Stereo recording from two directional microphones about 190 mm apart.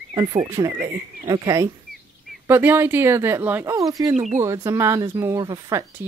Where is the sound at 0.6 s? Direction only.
15° right (ahead or behind).